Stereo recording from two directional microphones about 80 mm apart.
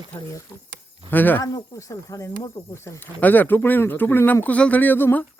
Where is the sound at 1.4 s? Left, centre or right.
Left.